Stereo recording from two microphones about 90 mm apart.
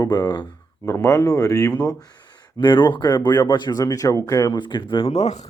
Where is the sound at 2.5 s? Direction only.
65° left (ahead or behind); by 4.6 s 40° left (ahead or behind).